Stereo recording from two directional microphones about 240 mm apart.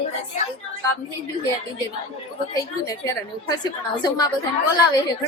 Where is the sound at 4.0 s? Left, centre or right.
Centre.